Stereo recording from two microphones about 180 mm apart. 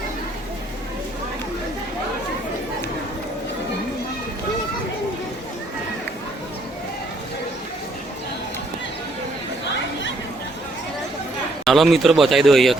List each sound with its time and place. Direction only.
11.6 s speech: centre (ahead or behind)